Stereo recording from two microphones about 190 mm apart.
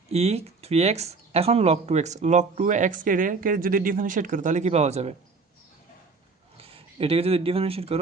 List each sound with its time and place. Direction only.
0.1 s speech: 35° right (ahead or behind)
6.6 s speech: 30° right (ahead or behind)